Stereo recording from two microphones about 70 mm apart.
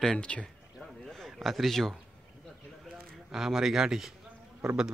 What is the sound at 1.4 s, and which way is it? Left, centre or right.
Speech, centre.